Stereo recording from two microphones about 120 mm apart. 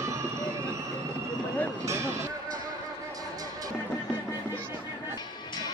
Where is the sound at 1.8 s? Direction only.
25° right (ahead or behind).